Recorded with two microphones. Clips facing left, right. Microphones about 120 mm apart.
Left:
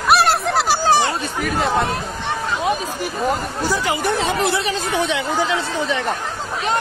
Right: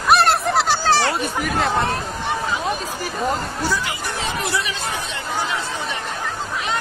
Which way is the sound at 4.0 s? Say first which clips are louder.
Left 7 dB; 60° left (ahead or behind).